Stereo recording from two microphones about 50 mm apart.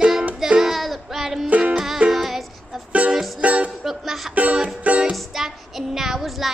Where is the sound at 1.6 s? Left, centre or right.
Right.